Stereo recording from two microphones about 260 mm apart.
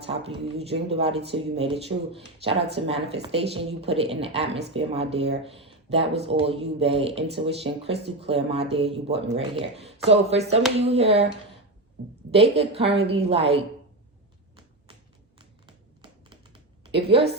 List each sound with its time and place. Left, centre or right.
0.0 s a woman's voice: right
12.3 s a woman's voice: right
15.4 s typing: centre